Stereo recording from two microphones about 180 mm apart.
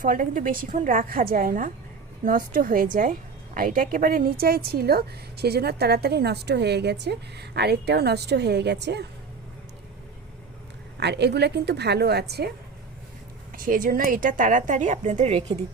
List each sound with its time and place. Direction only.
0.0 s a woman's voice: 50° right (ahead or behind); by 9.0 s 70° right (ahead or behind)
11.0 s a woman's voice: 70° right (ahead or behind)
13.5 s a woman's voice: 50° right (ahead or behind)